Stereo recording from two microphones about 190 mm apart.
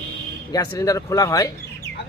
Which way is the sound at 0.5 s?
20° left (ahead or behind).